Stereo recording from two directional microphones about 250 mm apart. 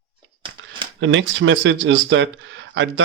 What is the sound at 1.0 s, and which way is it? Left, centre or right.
Speech, right.